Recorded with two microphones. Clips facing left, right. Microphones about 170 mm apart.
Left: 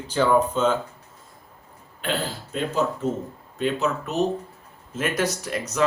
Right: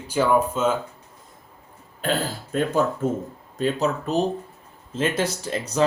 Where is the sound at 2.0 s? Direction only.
45° right (ahead or behind).